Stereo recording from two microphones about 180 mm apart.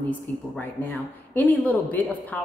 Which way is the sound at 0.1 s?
10° left (ahead or behind).